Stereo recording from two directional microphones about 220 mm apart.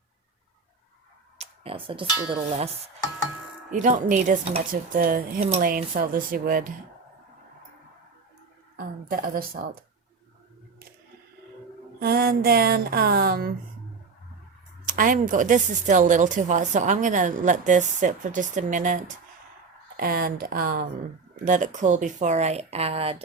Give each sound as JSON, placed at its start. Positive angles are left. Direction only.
{"t": 1.4, "sound": "speech", "side_deg": -25}
{"t": 3.7, "sound": "a woman's voice", "side_deg": -35}
{"t": 8.7, "sound": "a sound", "side_deg": -40}
{"t": 11.9, "sound": "speech", "side_deg": -45}
{"t": 14.8, "sound": "a woman's voice", "side_deg": -35}